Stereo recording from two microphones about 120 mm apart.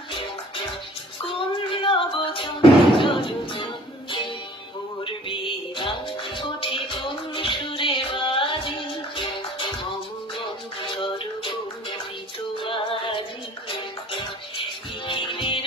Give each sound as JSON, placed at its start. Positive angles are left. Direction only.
{"t": 1.2, "sound": "music", "side_deg": 45}
{"t": 5.0, "sound": "music", "side_deg": 45}
{"t": 12.5, "sound": "music", "side_deg": 45}